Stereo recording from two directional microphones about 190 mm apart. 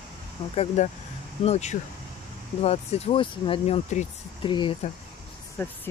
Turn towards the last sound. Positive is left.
turn(degrees=10)  # may be behind; listen again after turning